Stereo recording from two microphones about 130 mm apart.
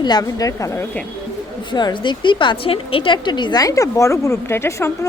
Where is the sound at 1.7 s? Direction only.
35° left (ahead or behind).